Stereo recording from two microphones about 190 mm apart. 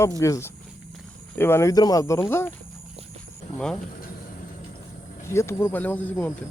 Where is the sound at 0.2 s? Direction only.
15° left (ahead or behind).